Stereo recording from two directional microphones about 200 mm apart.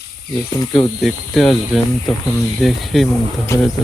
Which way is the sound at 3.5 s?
15° left (ahead or behind).